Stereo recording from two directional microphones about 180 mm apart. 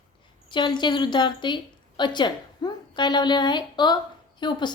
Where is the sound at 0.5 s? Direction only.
25° left (ahead or behind).